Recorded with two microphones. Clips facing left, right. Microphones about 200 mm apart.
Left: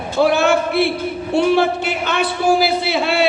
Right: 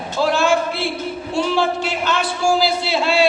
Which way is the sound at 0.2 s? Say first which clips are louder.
Left 3 dB; 60° left (ahead or behind).